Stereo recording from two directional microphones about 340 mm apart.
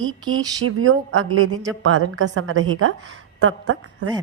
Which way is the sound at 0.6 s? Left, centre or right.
Right.